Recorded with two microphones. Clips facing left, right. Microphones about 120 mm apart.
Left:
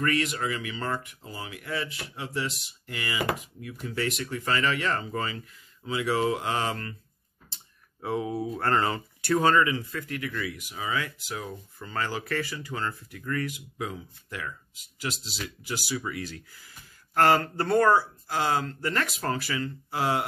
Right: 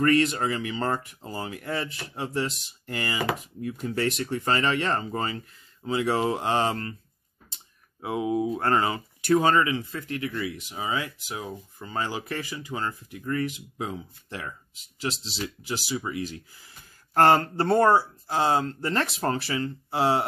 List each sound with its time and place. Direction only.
0.0 s speech: 35° right (ahead or behind)
8.0 s speech: 15° right (ahead or behind)
17.1 s speech: 35° right (ahead or behind)